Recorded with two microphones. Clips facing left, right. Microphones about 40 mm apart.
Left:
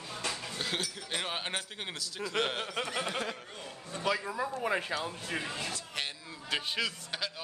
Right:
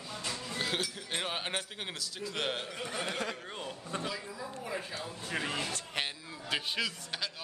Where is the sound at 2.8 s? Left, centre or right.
Left.